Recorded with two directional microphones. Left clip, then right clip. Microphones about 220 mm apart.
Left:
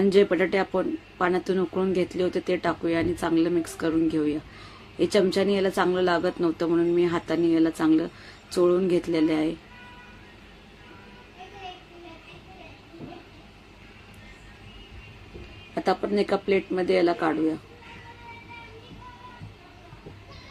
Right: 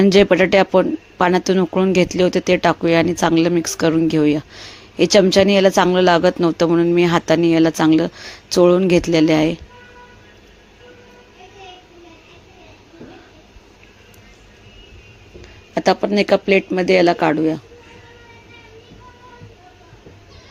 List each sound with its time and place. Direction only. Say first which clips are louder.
0.0 s speech: right 8 dB; 40° right (ahead or behind)
15.7 s speech: right 9 dB; 40° right (ahead or behind)